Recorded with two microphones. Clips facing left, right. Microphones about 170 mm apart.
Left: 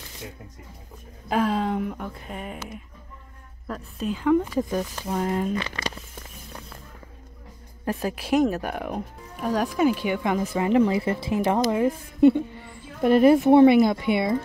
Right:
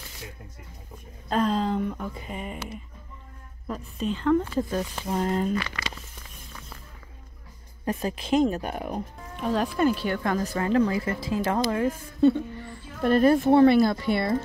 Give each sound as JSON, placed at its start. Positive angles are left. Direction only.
{"t": 1.3, "sound": "speech", "side_deg": 5}
{"t": 3.6, "sound": "speech", "side_deg": 0}
{"t": 5.6, "sound": "speech", "side_deg": 25}
{"t": 7.8, "sound": "speech", "side_deg": 5}